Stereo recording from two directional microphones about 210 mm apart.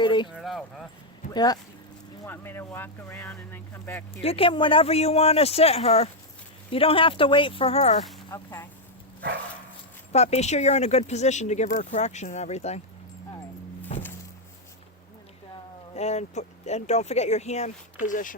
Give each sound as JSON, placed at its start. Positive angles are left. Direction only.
{"t": 0.0, "sound": "clip-clop", "side_deg": 20}
{"t": 0.3, "sound": "a sound", "side_deg": 0}
{"t": 1.3, "sound": "speech", "side_deg": 20}
{"t": 4.2, "sound": "speech", "side_deg": 25}
{"t": 8.3, "sound": "speech", "side_deg": 15}
{"t": 10.1, "sound": "speech", "side_deg": 30}
{"t": 16.0, "sound": "speech", "side_deg": 30}